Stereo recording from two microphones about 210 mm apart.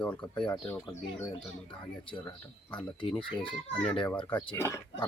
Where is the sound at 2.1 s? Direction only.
20° left (ahead or behind).